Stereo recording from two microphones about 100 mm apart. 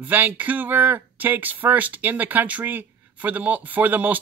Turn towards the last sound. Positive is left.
turn(degrees=-20)  # may be behind; listen again after turning